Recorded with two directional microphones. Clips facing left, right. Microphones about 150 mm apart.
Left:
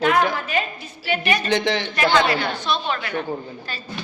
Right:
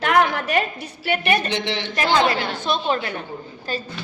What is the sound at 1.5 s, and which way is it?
Speech, 45° left (ahead or behind).